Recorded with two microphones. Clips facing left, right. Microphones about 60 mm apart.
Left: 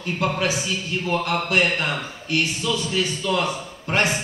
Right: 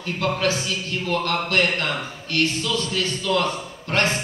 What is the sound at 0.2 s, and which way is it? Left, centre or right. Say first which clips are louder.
Speech: right 1 dB; centre.